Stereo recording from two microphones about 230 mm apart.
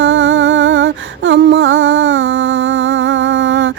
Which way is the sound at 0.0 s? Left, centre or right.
Right.